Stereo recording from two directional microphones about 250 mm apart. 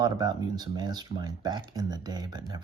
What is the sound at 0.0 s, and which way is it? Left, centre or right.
Speech, centre.